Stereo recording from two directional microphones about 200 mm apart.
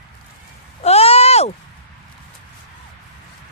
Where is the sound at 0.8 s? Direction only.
30° left (ahead or behind).